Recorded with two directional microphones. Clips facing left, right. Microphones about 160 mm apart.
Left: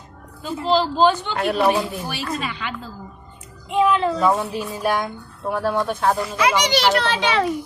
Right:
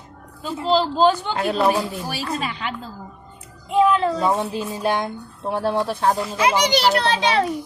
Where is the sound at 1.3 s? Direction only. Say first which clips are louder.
Left 1 dB; 30° right (ahead or behind).